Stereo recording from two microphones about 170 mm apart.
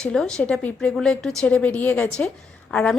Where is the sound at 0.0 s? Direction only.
5° left (ahead or behind).